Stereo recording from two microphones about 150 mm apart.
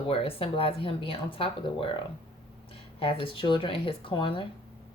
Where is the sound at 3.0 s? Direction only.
35° left (ahead or behind).